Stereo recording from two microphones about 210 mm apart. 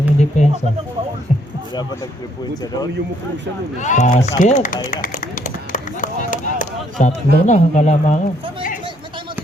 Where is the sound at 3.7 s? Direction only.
35° left (ahead or behind).